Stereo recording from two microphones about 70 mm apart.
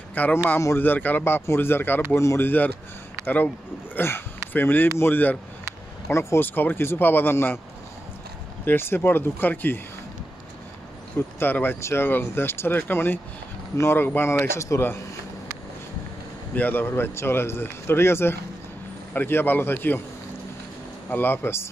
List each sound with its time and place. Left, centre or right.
0.1 s a man's voice: left
8.6 s a man's voice: left
11.3 s a man's voice: left
16.5 s a man's voice: left
21.1 s a man's voice: left